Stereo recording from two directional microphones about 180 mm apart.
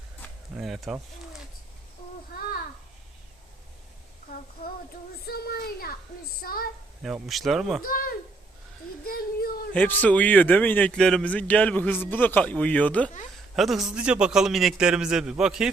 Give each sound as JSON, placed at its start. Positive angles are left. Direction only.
{"t": 0.5, "sound": "a man's voice", "side_deg": 0}
{"t": 5.2, "sound": "a child's voice", "side_deg": 60}
{"t": 7.0, "sound": "a man's voice", "side_deg": 0}
{"t": 7.9, "sound": "a child's voice", "side_deg": 55}
{"t": 9.7, "sound": "a man's voice", "side_deg": 10}